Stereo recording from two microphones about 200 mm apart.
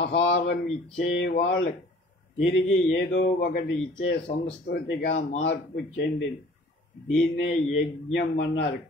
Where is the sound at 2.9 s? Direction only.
55° left (ahead or behind).